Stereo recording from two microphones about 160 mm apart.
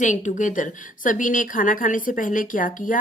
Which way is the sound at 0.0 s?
50° left (ahead or behind).